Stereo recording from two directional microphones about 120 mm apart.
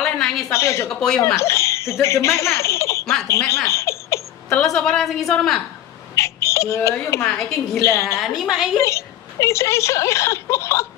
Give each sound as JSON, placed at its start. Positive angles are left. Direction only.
{"t": 0.0, "sound": "a sound", "side_deg": 5}
{"t": 0.5, "sound": "a woman's voice", "side_deg": 25}
{"t": 0.9, "sound": "a woman's voice", "side_deg": 5}
{"t": 1.2, "sound": "speech", "side_deg": 25}
{"t": 4.5, "sound": "a woman's voice", "side_deg": 5}
{"t": 6.1, "sound": "a child's voice", "side_deg": 25}
{"t": 7.2, "sound": "a woman's voice", "side_deg": 5}
{"t": 7.8, "sound": "a woman's voice", "side_deg": 25}
{"t": 8.2, "sound": "a woman's voice", "side_deg": -5}
{"t": 8.7, "sound": "a woman's voice", "side_deg": 25}